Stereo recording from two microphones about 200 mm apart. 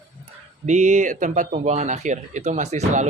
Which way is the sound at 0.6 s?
35° right (ahead or behind).